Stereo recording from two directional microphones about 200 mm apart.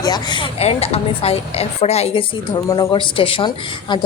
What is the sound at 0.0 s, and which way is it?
A woman's voice, 20° left (ahead or behind).